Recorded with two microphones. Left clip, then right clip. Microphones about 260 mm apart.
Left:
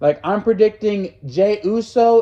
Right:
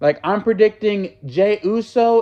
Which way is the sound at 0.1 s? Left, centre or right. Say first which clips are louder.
Left 1 dB; right.